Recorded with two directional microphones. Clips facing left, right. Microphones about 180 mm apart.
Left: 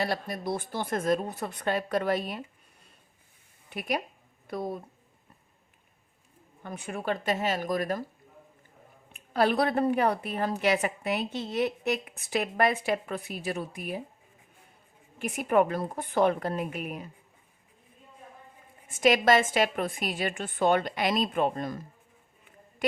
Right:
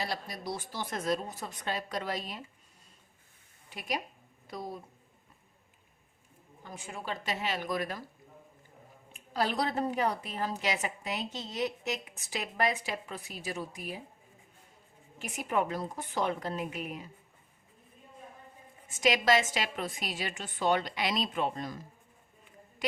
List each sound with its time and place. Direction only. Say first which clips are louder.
0.0 s a woman's voice: left 6 dB; 55° left (ahead or behind)
3.7 s a woman's voice: left 5 dB; 60° left (ahead or behind)
6.6 s a woman's voice: left 6 dB; 60° left (ahead or behind)
9.1 s a woman's voice: left 6 dB; 60° left (ahead or behind)
15.2 s a woman's voice: left 7 dB; 55° left (ahead or behind)
18.9 s a woman's voice: left 5 dB; 55° left (ahead or behind)